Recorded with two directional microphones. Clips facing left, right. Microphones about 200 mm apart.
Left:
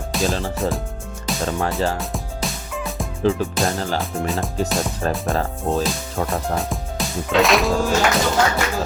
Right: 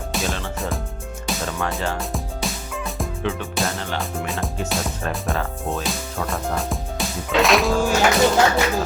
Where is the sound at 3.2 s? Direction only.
35° left (ahead or behind).